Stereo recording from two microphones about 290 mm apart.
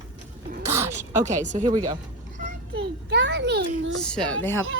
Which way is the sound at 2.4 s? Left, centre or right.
Right.